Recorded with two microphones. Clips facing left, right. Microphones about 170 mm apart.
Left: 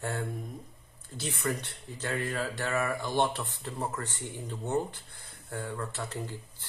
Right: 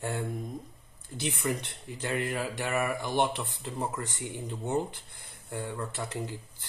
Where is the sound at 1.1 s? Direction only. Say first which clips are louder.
Right 2 dB; 15° right (ahead or behind).